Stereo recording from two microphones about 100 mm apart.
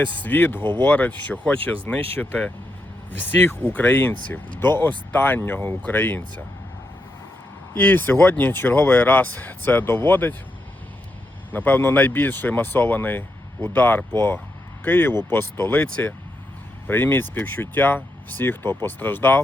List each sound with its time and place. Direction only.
0.2 s speech: 20° left (ahead or behind)
7.8 s speech: 20° left (ahead or behind)
11.5 s speech: 20° left (ahead or behind)